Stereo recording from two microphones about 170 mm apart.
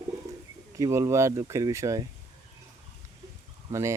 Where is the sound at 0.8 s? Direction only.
20° right (ahead or behind).